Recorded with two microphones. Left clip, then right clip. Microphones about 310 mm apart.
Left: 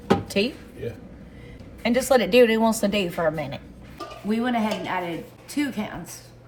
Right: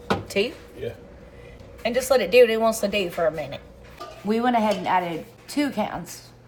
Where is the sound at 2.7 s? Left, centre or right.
Right.